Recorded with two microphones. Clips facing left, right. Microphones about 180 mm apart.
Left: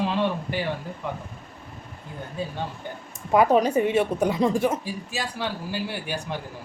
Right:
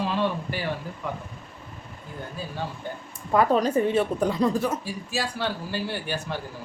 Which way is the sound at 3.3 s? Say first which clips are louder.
Left 2 dB; 10° left (ahead or behind).